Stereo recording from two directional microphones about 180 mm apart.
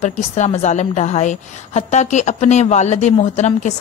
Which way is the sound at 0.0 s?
40° left (ahead or behind).